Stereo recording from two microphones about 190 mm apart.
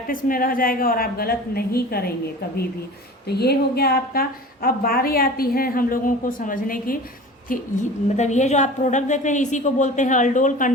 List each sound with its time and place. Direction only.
0.1 s a woman's voice: 50° left (ahead or behind)
3.2 s a woman's voice: 55° left (ahead or behind); by 10.7 s 40° left (ahead or behind)